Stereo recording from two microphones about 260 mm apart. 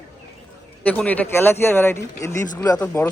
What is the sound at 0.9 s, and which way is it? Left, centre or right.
Speech, centre.